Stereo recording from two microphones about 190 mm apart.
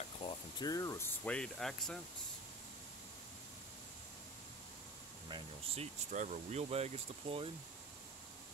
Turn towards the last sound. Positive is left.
turn(degrees=-30)  # may be behind; listen again after turning